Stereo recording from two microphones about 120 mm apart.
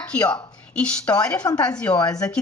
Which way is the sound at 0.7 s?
10° left (ahead or behind).